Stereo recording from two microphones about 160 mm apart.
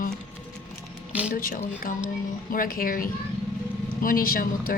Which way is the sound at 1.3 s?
60° left (ahead or behind).